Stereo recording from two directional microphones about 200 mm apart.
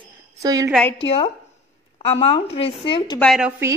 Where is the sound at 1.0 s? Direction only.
25° left (ahead or behind).